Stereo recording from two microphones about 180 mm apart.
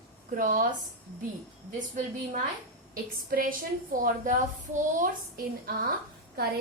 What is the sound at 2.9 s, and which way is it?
A woman's voice, 50° right (ahead or behind).